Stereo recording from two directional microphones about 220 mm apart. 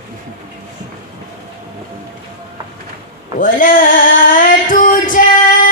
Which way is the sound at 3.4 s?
40° left (ahead or behind).